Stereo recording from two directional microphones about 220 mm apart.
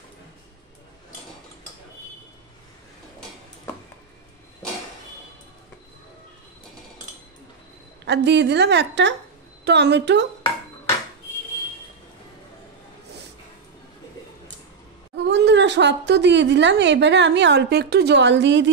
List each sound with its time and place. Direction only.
8.0 s a woman's voice: 50° right (ahead or behind)
15.1 s speech: 55° right (ahead or behind)